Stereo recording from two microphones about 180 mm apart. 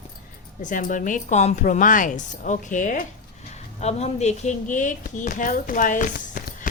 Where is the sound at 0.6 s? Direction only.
45° left (ahead or behind).